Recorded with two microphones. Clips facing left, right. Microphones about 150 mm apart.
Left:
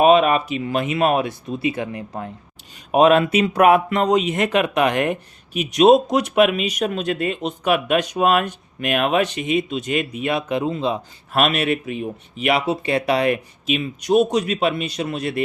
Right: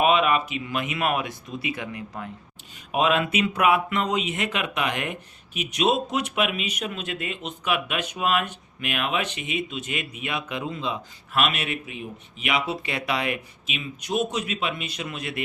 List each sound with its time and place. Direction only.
0.0 s speech: 40° left (ahead or behind)